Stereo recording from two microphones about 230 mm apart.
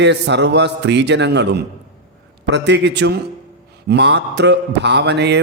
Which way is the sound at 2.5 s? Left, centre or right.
Right.